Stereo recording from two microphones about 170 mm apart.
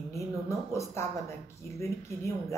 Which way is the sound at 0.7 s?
15° left (ahead or behind).